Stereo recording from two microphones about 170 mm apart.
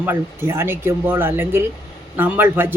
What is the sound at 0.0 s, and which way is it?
Speech, 15° right (ahead or behind).